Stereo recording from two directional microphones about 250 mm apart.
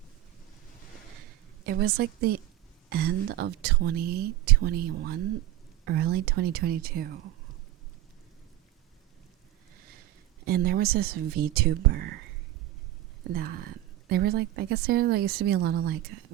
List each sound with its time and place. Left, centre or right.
1.6 s a woman's voice: right
10.4 s a woman's voice: right
13.3 s a woman's voice: right